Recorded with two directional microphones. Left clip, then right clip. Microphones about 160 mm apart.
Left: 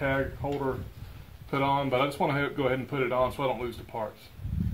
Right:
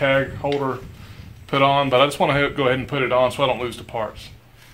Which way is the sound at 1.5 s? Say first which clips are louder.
Right 10 dB; 15° right (ahead or behind).